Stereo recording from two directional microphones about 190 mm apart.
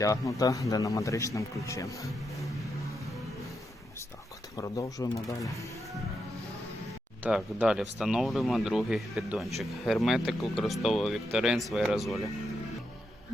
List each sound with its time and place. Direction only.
0.0 s speech: 15° left (ahead or behind)
4.5 s speech: 20° left (ahead or behind)
7.2 s speech: 5° right (ahead or behind)